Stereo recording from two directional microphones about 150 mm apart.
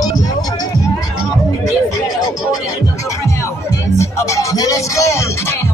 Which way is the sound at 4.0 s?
20° left (ahead or behind).